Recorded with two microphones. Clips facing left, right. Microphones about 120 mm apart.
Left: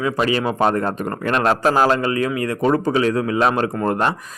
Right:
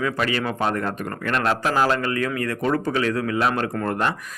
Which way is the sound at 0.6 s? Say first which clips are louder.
Left 5 dB; 35° left (ahead or behind).